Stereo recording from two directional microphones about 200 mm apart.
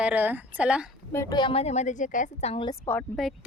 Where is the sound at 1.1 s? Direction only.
15° left (ahead or behind); by 2.7 s 30° left (ahead or behind).